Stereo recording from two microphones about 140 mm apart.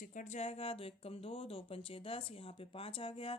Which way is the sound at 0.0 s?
70° left (ahead or behind).